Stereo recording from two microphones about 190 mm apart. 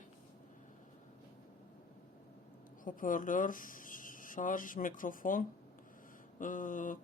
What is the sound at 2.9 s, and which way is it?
A woman's voice, 45° left (ahead or behind).